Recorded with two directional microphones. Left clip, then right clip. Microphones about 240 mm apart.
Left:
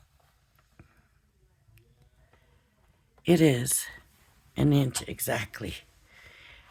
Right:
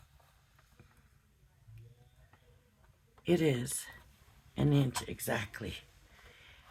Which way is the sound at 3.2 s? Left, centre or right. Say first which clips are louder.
Left 8 dB; left.